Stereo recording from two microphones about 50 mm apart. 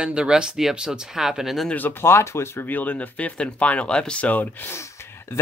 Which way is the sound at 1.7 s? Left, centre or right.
Left.